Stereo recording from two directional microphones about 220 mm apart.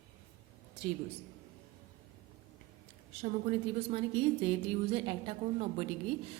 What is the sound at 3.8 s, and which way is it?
A woman's voice, 25° right (ahead or behind).